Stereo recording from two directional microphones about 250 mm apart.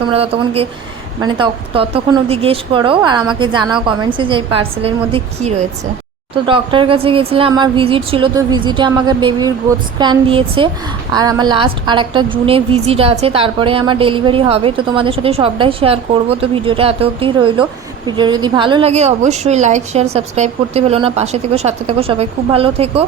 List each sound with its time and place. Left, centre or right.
0.1 s a woman's voice: right